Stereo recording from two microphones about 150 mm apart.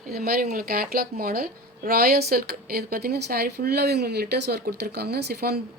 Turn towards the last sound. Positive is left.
turn(degrees=-90)